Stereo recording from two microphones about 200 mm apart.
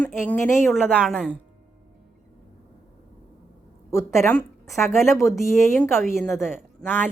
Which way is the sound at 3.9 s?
15° left (ahead or behind).